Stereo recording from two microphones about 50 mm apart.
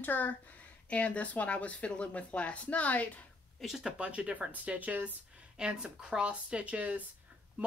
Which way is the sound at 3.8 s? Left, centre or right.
Right.